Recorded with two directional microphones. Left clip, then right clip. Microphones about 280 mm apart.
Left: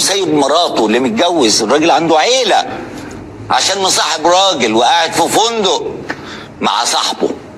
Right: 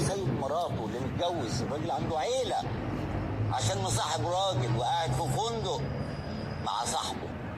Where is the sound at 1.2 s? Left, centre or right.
Left.